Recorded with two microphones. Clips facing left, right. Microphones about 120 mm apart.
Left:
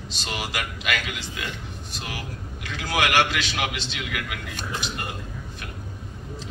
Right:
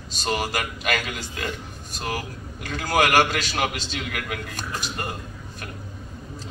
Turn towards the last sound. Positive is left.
turn(degrees=-40)  # may be behind; listen again after turning